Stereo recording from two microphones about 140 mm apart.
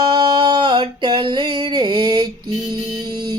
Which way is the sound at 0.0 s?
30° right (ahead or behind).